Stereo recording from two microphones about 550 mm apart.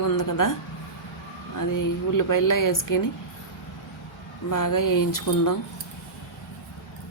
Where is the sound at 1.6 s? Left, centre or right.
Left.